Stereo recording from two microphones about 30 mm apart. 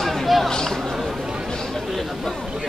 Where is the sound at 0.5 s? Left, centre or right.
Centre.